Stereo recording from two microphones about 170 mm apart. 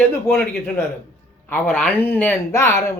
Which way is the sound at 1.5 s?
10° left (ahead or behind).